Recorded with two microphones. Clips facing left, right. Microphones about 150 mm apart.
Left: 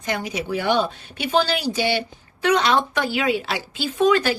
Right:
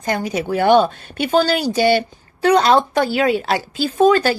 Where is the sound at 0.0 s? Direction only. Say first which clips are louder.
Right 5 dB; 45° right (ahead or behind).